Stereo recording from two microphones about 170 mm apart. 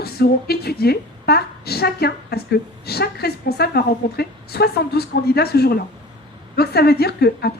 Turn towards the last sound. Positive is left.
turn(degrees=70)  # may be behind; listen again after turning